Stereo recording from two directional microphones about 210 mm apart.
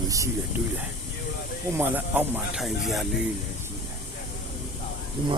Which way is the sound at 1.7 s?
10° right (ahead or behind).